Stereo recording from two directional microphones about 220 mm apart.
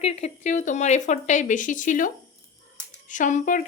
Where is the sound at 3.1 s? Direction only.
35° left (ahead or behind).